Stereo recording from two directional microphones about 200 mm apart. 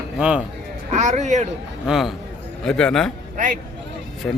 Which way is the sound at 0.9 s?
35° right (ahead or behind).